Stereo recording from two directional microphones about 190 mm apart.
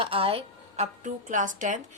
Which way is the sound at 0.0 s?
30° right (ahead or behind).